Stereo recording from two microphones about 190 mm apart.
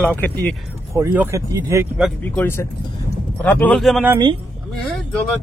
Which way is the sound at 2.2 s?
10° left (ahead or behind).